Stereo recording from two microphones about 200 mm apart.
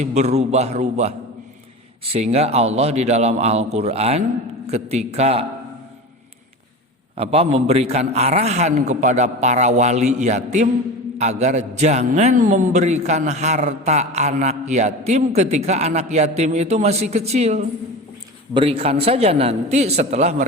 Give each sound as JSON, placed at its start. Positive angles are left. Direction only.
{"t": 0.0, "sound": "a man's voice", "side_deg": -35}
{"t": 7.2, "sound": "a man's voice", "side_deg": -30}